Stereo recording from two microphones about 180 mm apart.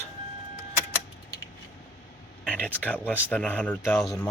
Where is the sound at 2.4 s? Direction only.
5° left (ahead or behind).